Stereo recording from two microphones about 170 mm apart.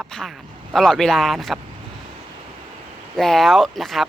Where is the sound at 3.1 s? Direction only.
Centre (ahead or behind).